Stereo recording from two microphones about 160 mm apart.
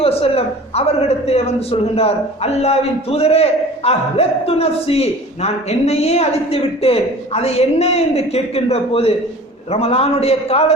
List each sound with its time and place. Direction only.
0.0 s a man's voice: 35° left (ahead or behind)